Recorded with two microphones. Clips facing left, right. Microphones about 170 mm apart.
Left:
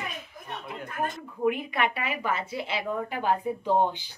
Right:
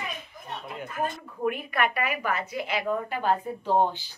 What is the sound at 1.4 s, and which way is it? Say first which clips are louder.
A woman's voice: left 1 dB; 20° left (ahead or behind).